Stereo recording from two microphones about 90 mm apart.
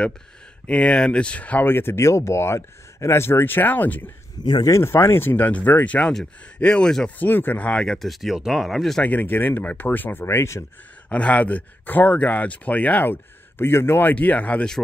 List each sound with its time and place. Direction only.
0.7 s speech: 15° left (ahead or behind)
4.4 s speech: 55° left (ahead or behind)
4.6 s speech: 30° left (ahead or behind); by 7.1 s 10° left (ahead or behind)
7.2 s speech: 20° left (ahead or behind); by 9.0 s centre (ahead or behind)
9.0 s speech: 20° left (ahead or behind)
11.1 s speech: 15° left (ahead or behind)